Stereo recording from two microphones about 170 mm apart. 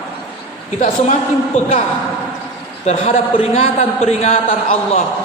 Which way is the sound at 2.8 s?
40° left (ahead or behind).